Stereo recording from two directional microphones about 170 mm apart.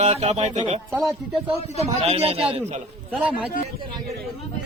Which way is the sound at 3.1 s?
10° right (ahead or behind).